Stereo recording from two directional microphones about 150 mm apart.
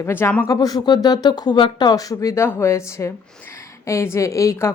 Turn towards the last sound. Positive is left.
turn(degrees=20)  # may be behind; listen again after turning